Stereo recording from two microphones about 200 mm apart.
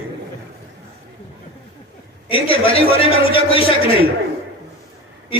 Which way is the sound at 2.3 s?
25° left (ahead or behind).